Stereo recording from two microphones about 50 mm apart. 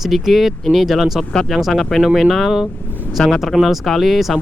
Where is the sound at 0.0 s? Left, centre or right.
Centre.